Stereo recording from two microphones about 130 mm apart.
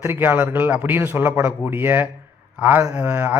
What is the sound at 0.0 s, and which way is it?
A man's voice, 15° right (ahead or behind).